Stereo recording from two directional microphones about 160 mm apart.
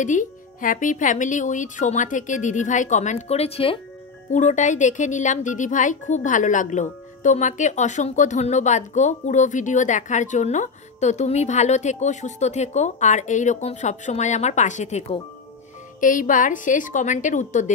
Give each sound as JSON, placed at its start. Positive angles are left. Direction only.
{"t": 0.0, "sound": "speech", "side_deg": 50}
{"t": 4.3, "sound": "speech", "side_deg": 50}